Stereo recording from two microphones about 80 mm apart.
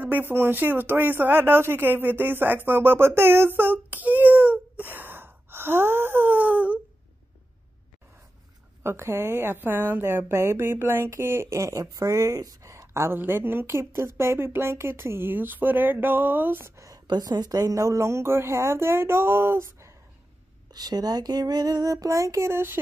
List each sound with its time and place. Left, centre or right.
0.0 s speech: right
8.8 s a woman's voice: right
17.1 s a woman's voice: right
20.7 s a sound: right